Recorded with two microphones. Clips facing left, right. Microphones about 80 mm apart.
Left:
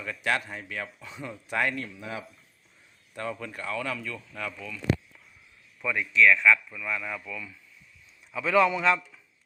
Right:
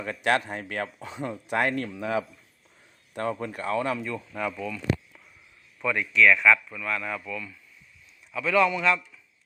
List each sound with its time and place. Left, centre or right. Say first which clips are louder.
0.3 s speech: right 4 dB; right
1.7 s speech: right 8 dB; right
3.2 s speech: right 5 dB; right
3.9 s speech: right 5 dB; right
5.8 s speech: right 1 dB; centre
8.3 s a man's voice: even; left